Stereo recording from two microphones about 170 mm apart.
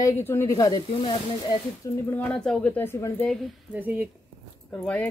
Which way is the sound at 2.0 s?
10° left (ahead or behind).